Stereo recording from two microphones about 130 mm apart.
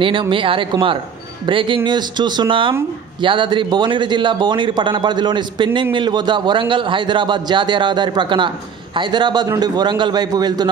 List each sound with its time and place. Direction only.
0.0 s speech: 40° right (ahead or behind)